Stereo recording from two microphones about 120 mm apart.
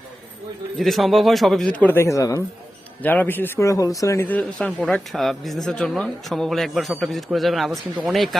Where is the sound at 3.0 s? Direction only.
15° left (ahead or behind).